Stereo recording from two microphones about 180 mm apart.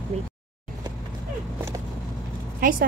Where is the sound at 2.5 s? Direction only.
50° right (ahead or behind).